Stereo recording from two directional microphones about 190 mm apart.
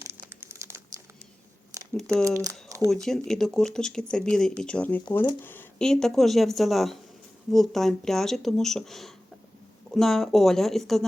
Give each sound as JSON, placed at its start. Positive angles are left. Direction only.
{"t": 0.0, "sound": "crumpling", "side_deg": -15}
{"t": 1.7, "sound": "a sound", "side_deg": -20}
{"t": 2.2, "sound": "speech", "side_deg": -15}
{"t": 2.9, "sound": "speech", "side_deg": 0}